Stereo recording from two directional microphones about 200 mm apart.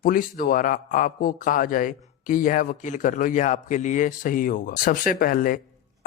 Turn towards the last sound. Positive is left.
turn(degrees=45)  # may be behind; listen again after turning